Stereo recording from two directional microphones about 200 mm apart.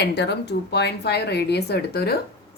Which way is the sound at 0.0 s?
55° left (ahead or behind).